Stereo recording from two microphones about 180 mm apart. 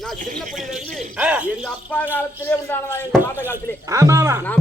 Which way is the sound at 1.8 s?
10° left (ahead or behind).